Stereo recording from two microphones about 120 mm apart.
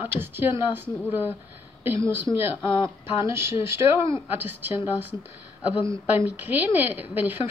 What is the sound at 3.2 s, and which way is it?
Speech, 20° right (ahead or behind).